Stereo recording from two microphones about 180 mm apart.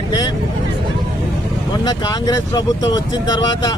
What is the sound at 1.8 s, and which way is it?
Speech, 20° left (ahead or behind).